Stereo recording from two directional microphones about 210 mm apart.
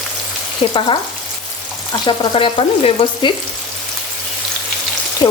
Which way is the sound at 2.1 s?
25° left (ahead or behind).